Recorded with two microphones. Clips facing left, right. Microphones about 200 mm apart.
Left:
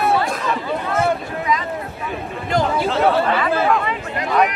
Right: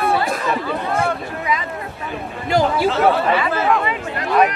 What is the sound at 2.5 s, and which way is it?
Speech, 5° right (ahead or behind).